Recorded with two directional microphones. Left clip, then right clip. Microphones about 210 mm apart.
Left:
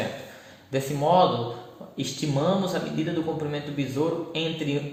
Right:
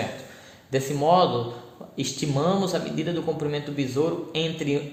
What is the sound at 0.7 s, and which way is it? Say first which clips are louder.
A man's voice: right 2 dB; 40° right (ahead or behind).